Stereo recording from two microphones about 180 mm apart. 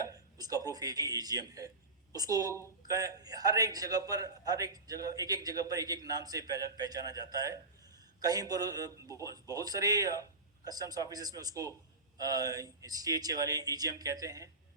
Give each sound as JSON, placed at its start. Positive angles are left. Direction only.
{"t": 0.0, "sound": "speech", "side_deg": -20}